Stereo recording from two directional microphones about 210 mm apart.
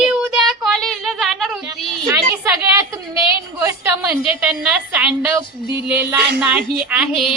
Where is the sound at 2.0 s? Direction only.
10° right (ahead or behind).